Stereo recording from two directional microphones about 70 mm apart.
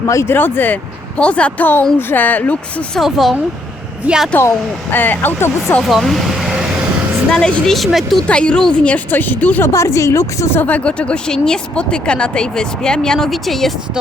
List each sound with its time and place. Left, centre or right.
0.1 s speech: left
0.3 s a woman's voice: left
1.2 s a woman's voice: centre
3.0 s speech: centre
4.4 s speech: left
5.8 s speech: centre
7.3 s speech: centre
8.3 s a woman's voice: centre
9.6 s speech: left
10.6 s speech: left; by 13.7 s centre